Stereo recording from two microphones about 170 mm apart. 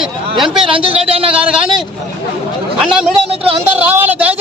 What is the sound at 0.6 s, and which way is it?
Speech, 30° right (ahead or behind).